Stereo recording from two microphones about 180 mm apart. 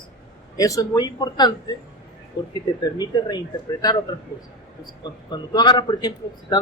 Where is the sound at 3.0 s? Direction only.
25° left (ahead or behind).